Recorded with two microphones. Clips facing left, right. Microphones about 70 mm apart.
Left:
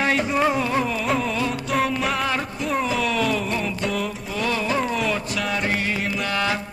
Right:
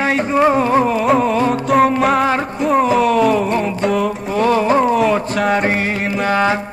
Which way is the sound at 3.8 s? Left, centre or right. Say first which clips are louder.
Right 9 dB; right.